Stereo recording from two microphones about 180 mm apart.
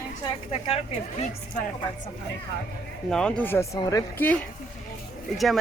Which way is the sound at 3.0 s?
5° left (ahead or behind).